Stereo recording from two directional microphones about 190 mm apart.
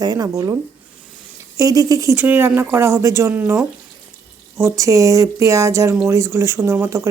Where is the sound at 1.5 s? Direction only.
20° right (ahead or behind).